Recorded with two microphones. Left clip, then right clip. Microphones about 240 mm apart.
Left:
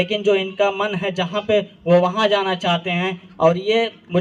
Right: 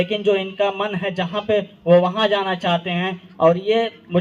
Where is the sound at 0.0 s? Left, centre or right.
Left.